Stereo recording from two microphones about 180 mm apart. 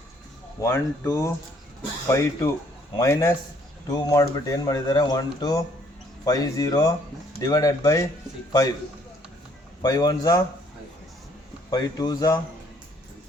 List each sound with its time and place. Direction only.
0.6 s speech: 15° left (ahead or behind)
9.8 s speech: 20° left (ahead or behind)
11.7 s speech: 20° left (ahead or behind)